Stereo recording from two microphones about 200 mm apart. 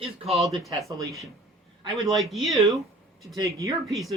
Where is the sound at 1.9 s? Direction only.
Centre (ahead or behind).